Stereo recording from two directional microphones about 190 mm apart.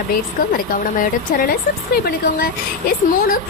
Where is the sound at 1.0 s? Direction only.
45° left (ahead or behind).